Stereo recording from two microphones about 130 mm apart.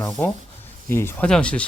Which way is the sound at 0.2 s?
15° left (ahead or behind).